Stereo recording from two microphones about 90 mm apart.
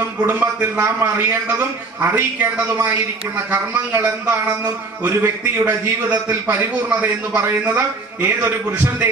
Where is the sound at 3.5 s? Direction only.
20° right (ahead or behind).